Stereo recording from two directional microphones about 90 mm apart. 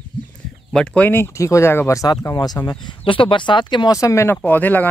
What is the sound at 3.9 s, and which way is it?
Speech, 35° left (ahead or behind).